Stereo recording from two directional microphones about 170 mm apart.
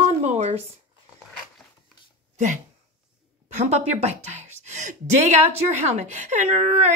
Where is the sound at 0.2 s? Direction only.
40° right (ahead or behind).